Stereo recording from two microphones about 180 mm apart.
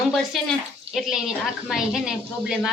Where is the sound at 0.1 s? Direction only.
Centre (ahead or behind).